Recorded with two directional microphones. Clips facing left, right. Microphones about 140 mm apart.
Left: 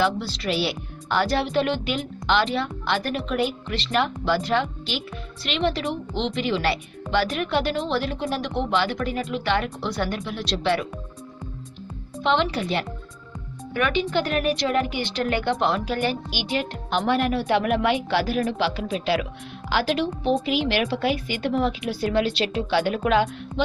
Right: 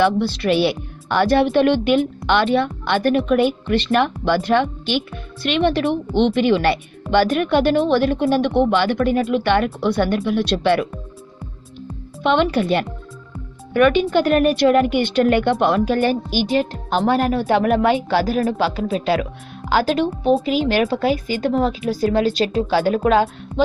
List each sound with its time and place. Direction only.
0.0 s speech: 60° right (ahead or behind)
12.2 s speech: 55° right (ahead or behind)
16.0 s speech: 45° right (ahead or behind)